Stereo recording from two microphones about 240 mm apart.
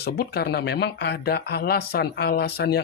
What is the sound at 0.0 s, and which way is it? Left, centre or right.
Speech, left.